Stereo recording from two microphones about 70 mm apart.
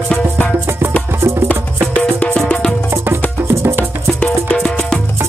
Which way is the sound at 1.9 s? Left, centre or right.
Centre.